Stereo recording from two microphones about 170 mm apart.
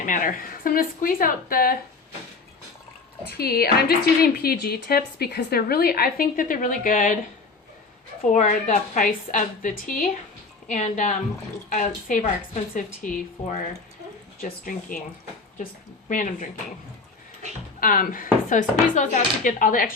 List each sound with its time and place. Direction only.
0.0 s speech: 50° left (ahead or behind)
3.2 s speech: 65° left (ahead or behind); by 7.2 s 50° left (ahead or behind)
8.3 s a woman's voice: 45° left (ahead or behind)
16.0 s a woman's voice: 50° left (ahead or behind)
17.7 s a woman's voice: 55° left (ahead or behind)